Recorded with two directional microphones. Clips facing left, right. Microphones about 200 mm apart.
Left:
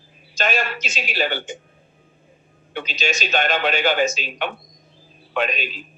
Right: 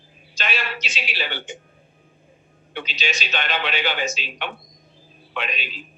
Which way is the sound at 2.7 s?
45° left (ahead or behind).